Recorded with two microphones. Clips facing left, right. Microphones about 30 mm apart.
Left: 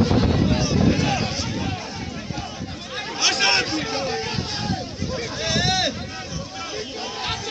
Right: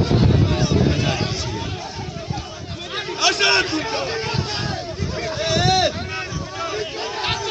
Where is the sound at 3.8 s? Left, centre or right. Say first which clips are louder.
Right 2 dB; right.